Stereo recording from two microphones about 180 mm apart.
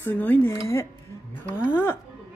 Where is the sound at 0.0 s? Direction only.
10° left (ahead or behind).